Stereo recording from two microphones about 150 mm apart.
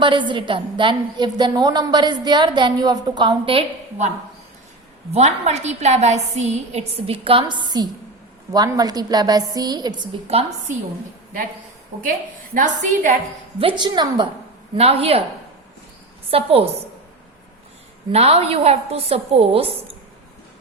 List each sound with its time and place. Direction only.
0.0 s a woman's voice: 30° right (ahead or behind)
5.1 s a woman's voice: 45° right (ahead or behind); by 9.9 s 25° right (ahead or behind)
10.0 s a woman's voice: 40° right (ahead or behind)
12.5 s a woman's voice: 55° right (ahead or behind)
13.6 s a woman's voice: 35° right (ahead or behind)
14.8 s a woman's voice: 40° right (ahead or behind)
16.3 s a woman's voice: 40° right (ahead or behind)
18.1 s a woman's voice: 45° right (ahead or behind)